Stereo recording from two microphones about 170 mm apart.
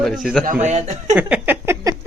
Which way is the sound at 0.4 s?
45° right (ahead or behind).